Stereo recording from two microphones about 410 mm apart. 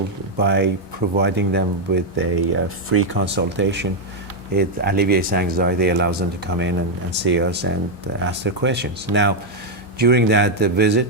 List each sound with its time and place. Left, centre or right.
0.3 s speech: right